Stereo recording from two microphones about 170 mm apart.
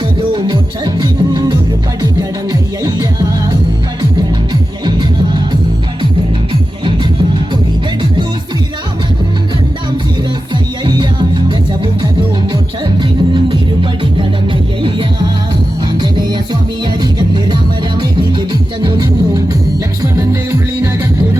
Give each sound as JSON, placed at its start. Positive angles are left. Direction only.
{"t": 0.2, "sound": "music", "side_deg": -25}
{"t": 4.9, "sound": "music", "side_deg": -25}
{"t": 10.8, "sound": "music", "side_deg": -25}
{"t": 13.0, "sound": "music", "side_deg": -25}
{"t": 14.8, "sound": "music", "side_deg": -30}